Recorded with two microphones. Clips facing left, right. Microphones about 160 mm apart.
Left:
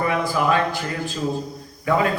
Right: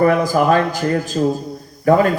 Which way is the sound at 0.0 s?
40° right (ahead or behind).